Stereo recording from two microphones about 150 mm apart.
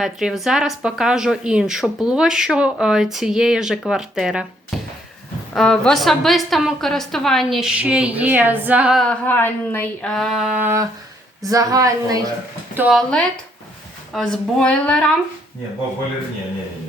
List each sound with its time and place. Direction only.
0.0 s a woman's voice: 5° right (ahead or behind)
4.7 s a sound: centre (ahead or behind)
5.5 s a woman's voice: 5° left (ahead or behind)
9.2 s a woman's voice: 15° left (ahead or behind); by 12.3 s 25° right (ahead or behind)
12.7 s speech: 10° right (ahead or behind)
13.0 s a woman's voice: 5° left (ahead or behind)